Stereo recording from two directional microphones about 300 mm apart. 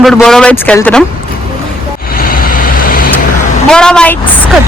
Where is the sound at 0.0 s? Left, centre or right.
Centre.